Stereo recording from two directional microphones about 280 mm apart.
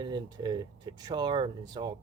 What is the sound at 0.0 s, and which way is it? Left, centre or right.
Speech, centre.